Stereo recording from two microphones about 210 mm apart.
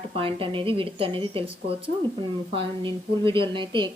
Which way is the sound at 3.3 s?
25° right (ahead or behind).